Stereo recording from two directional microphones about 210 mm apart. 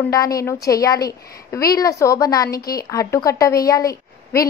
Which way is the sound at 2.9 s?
15° left (ahead or behind).